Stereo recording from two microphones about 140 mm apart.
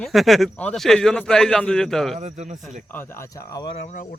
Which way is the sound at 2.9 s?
15° left (ahead or behind).